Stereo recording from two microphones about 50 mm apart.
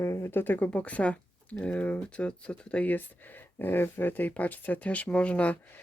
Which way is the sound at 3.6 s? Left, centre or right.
Left.